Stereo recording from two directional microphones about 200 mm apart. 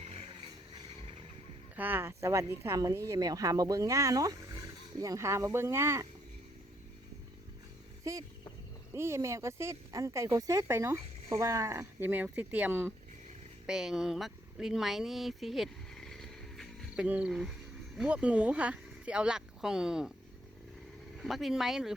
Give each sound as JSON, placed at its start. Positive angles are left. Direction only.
{"t": 0.0, "sound": "vehicle", "side_deg": -30}
{"t": 1.7, "sound": "speech", "side_deg": -10}
{"t": 8.1, "sound": "speech", "side_deg": -15}
{"t": 21.2, "sound": "speech", "side_deg": 0}